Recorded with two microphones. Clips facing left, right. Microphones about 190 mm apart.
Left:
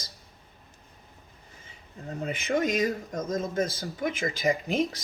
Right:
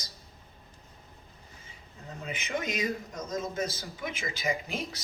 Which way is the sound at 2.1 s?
45° left (ahead or behind).